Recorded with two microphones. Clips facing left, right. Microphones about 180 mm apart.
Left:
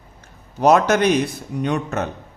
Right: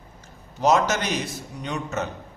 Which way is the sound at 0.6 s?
60° left (ahead or behind).